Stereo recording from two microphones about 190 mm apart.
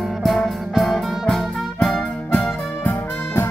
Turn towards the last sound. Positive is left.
turn(degrees=10)  # may be behind; listen again after turning